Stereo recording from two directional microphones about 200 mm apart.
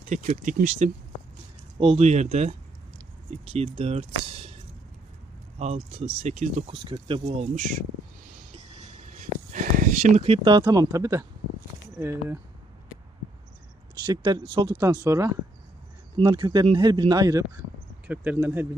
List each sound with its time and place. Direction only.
0.1 s speech: 40° right (ahead or behind)
5.5 s speech: 30° right (ahead or behind)
8.5 s a sound: 40° right (ahead or behind); by 11.3 s 15° right (ahead or behind)
11.9 s speech: 10° right (ahead or behind)
14.0 s speech: 20° right (ahead or behind)
18.1 s speech: 10° right (ahead or behind)